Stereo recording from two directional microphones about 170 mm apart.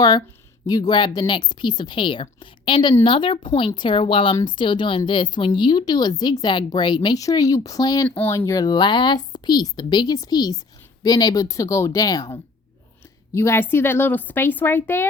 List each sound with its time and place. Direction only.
0.7 s speech: 25° left (ahead or behind)
8.0 s a woman's voice: 10° left (ahead or behind)